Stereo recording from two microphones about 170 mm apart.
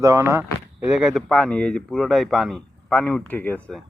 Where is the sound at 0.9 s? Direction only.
5° right (ahead or behind).